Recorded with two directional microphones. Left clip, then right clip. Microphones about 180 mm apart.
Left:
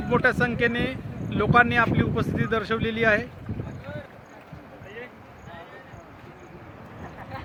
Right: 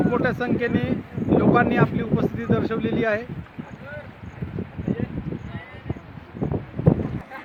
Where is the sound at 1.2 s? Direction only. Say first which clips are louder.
Right 9 dB; 50° left (ahead or behind).